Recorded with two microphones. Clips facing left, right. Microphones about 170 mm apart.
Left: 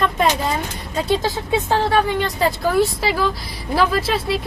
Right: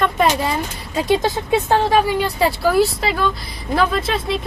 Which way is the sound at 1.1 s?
20° right (ahead or behind).